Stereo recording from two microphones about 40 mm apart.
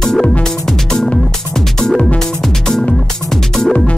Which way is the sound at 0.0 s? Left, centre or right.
Centre.